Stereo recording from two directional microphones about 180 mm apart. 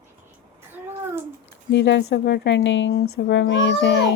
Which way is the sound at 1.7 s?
85° left.